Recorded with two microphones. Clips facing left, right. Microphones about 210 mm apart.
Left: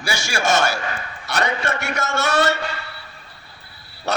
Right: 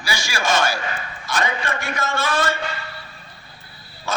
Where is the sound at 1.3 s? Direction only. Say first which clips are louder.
Left 2 dB; 65° left (ahead or behind).